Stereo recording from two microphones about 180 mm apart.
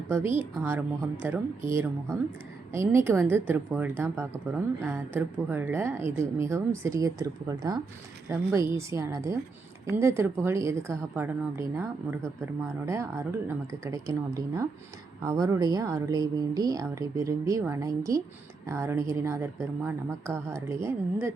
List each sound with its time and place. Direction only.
0.6 s speech: 10° right (ahead or behind)